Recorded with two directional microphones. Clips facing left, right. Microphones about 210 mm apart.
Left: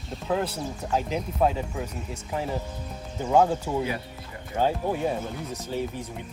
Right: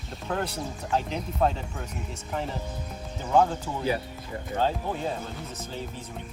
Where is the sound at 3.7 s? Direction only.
15° left (ahead or behind).